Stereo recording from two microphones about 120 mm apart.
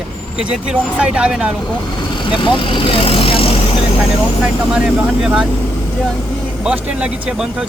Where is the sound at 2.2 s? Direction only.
40° left (ahead or behind).